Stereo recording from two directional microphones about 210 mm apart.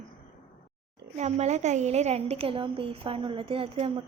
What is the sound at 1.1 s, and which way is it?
A woman's voice, 30° right (ahead or behind).